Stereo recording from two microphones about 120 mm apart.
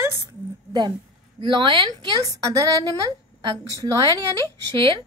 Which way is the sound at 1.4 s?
40° right (ahead or behind).